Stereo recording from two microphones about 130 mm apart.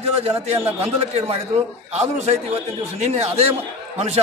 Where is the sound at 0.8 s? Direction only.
55° right (ahead or behind).